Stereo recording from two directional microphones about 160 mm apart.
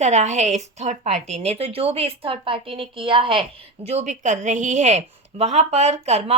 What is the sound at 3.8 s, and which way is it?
A woman's voice, 45° right (ahead or behind).